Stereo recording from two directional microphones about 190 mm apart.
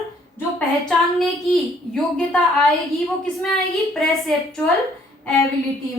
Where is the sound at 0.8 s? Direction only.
Centre (ahead or behind).